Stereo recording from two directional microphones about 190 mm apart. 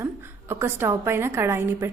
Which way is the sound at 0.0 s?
15° right (ahead or behind).